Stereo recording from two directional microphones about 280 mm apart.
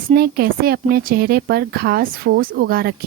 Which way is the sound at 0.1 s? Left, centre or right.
Right.